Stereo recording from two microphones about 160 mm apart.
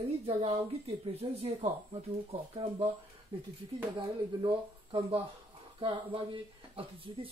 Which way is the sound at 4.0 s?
30° right (ahead or behind).